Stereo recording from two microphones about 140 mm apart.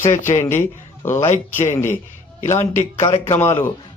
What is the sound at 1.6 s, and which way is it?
Speech, 15° left (ahead or behind).